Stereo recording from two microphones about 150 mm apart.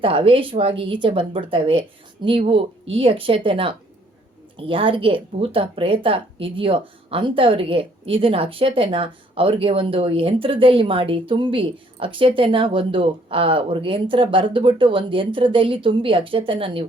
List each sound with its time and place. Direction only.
0.0 s a woman's voice: 35° right (ahead or behind)